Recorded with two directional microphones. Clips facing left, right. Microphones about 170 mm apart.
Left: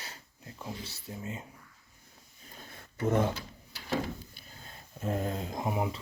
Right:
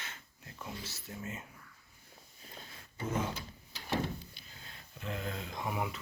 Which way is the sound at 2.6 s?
60° left (ahead or behind).